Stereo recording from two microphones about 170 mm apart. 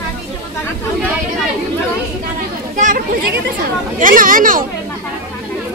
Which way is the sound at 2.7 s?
50° right (ahead or behind).